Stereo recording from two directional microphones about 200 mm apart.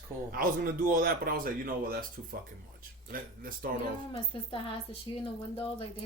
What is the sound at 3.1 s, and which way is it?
Speech, 45° right (ahead or behind).